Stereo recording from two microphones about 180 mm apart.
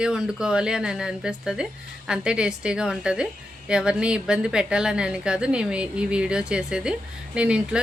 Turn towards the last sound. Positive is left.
turn(degrees=-5)  # may be behind; listen again after turning